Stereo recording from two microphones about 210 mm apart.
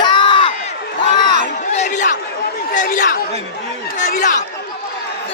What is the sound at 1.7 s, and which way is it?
Chatter, 35° left (ahead or behind).